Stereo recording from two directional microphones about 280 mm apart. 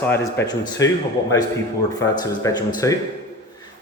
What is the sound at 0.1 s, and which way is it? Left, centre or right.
Speech, centre.